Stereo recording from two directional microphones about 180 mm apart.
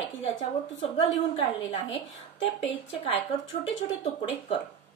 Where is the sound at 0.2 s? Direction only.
35° left (ahead or behind).